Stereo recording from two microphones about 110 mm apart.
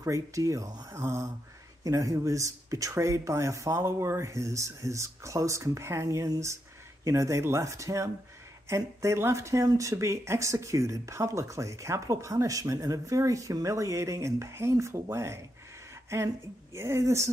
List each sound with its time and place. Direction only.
0.0 s speech: 30° right (ahead or behind)